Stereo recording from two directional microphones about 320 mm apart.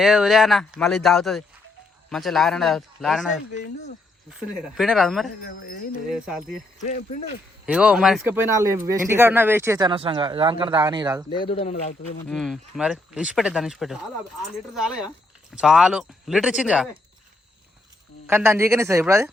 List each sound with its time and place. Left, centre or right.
0.0 s speech: centre
5.4 s speech: left
6.1 s speech: centre
6.8 s speech: left
7.7 s speech: centre
11.3 s speech: centre
12.3 s speech: centre
18.3 s speech: centre